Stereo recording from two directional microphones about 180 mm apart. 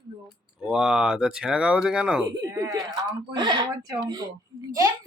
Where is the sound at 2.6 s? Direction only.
25° right (ahead or behind).